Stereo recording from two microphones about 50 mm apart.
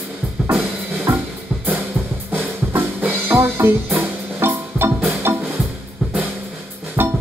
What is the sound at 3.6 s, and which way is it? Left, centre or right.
Music, right.